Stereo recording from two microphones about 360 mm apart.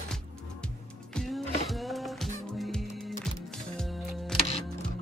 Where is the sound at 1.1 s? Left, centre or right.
Centre.